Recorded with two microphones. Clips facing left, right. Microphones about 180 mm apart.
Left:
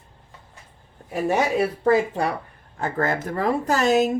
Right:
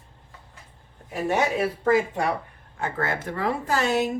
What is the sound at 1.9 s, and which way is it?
Speech, 35° left (ahead or behind).